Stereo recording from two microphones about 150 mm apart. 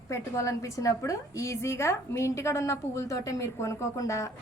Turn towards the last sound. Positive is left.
turn(degrees=20)  # may be behind; listen again after turning